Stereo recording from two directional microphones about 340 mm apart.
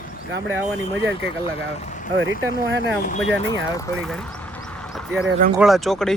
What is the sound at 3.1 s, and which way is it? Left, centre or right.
Speech, centre.